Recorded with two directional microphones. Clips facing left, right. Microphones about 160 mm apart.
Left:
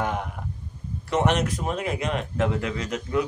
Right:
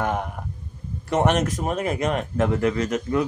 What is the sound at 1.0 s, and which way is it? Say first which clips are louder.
A man's voice: right 2 dB; 50° right (ahead or behind).